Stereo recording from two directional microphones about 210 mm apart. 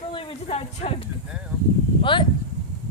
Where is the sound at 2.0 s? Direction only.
25° left (ahead or behind).